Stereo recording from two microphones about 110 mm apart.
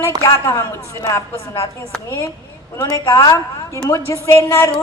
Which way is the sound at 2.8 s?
30° left (ahead or behind).